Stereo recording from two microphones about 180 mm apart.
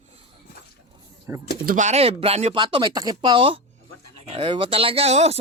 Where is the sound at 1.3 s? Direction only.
15° right (ahead or behind).